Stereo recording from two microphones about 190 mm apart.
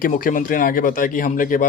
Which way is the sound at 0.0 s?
45° left (ahead or behind).